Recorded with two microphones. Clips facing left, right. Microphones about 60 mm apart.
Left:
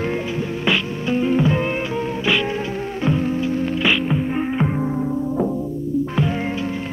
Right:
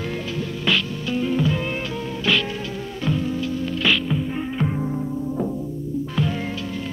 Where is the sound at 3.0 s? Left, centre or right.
Left.